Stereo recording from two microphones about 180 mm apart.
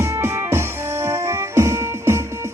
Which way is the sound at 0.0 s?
15° right (ahead or behind).